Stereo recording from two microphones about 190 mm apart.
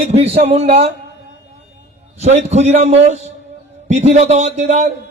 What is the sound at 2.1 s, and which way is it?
A man's voice, 35° right (ahead or behind).